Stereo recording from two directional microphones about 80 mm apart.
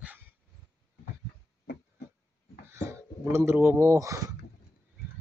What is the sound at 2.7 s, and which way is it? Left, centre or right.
Speech, right.